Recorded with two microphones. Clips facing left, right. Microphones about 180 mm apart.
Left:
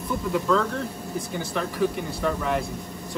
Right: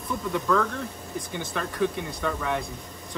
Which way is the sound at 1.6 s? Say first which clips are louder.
Left 1 dB; 5° left (ahead or behind).